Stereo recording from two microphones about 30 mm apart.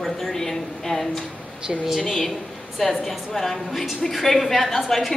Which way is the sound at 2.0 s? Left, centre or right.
Centre.